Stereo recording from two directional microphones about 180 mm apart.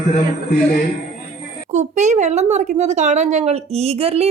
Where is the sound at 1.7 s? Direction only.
40° right (ahead or behind).